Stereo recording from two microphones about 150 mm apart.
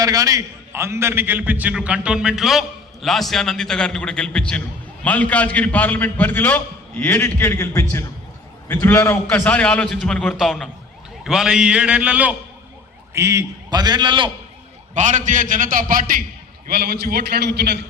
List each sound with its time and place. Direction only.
0.0 s a man's voice: 25° right (ahead or behind)
13.1 s a man's voice: 20° right (ahead or behind)
14.9 s a man's voice: 55° right (ahead or behind)
16.6 s a man's voice: 85° right